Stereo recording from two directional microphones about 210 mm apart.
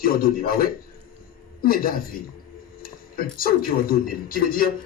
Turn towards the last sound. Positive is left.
turn(degrees=45)  # may be behind; listen again after turning